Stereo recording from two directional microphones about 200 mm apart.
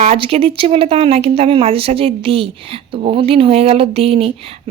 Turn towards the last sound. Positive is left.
turn(degrees=-30)  # may be behind; listen again after turning